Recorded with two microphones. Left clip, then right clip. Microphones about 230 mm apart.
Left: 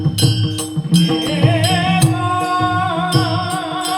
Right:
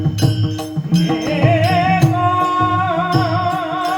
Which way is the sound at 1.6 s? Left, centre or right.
Left.